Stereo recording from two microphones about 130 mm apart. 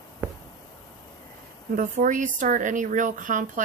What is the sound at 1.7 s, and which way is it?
Speech, 75° right (ahead or behind).